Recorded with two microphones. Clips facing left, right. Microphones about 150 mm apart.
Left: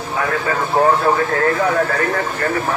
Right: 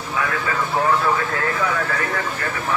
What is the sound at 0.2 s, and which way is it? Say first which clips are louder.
Speech: left 4 dB; 40° left (ahead or behind).